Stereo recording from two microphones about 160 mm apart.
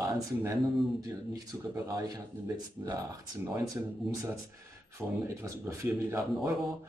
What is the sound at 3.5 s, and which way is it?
Speech, 20° right (ahead or behind).